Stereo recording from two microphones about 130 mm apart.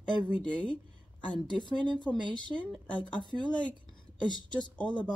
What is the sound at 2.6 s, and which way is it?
Speech, 10° left (ahead or behind).